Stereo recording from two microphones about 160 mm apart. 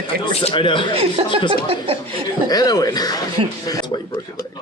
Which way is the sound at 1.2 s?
35° right (ahead or behind).